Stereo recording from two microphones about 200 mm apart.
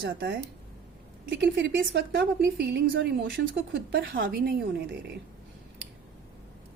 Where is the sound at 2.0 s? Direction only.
55° right (ahead or behind).